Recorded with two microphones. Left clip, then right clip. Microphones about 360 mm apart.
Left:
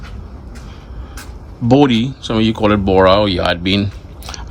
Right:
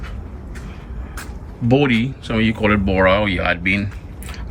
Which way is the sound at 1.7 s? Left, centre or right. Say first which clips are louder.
Left 5 dB; centre.